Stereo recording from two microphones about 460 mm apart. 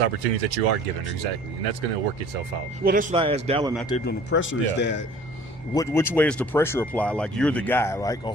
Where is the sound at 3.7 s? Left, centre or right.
Centre.